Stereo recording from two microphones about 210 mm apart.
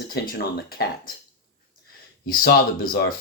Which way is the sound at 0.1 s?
50° left (ahead or behind).